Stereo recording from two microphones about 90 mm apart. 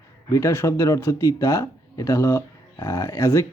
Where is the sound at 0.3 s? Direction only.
35° left (ahead or behind).